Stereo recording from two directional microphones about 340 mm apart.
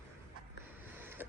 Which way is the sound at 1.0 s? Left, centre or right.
Centre.